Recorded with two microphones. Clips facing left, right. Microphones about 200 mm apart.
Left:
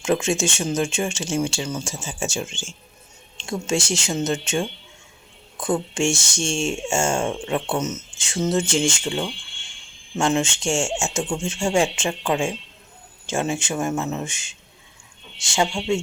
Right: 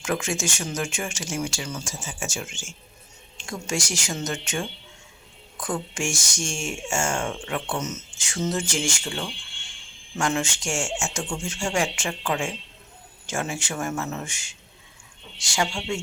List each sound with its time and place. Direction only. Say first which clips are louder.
0.0 s speech: left 6 dB; 25° left (ahead or behind)